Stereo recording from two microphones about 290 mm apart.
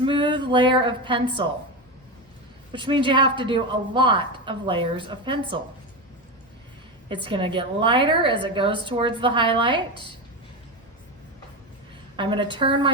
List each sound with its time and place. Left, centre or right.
0.0 s a woman's voice: centre
2.7 s a woman's voice: centre
7.1 s a woman's voice: centre
12.1 s a woman's voice: centre